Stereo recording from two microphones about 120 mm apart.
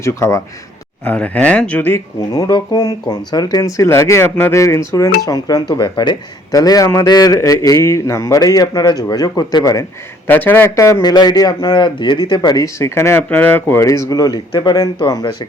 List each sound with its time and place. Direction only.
0.0 s speech: 25° left (ahead or behind)
1.0 s speech: 10° left (ahead or behind)
2.3 s speech: 30° left (ahead or behind)
10.2 s speech: 15° left (ahead or behind)
11.0 s speech: 35° left (ahead or behind)
12.6 s speech: 25° left (ahead or behind)
13.8 s speech: 25° left (ahead or behind)